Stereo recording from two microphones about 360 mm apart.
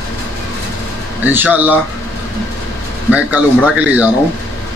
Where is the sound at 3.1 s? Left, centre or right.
Centre.